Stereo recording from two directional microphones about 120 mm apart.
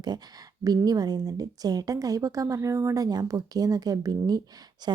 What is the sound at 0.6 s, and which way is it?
A woman's voice, 30° right (ahead or behind).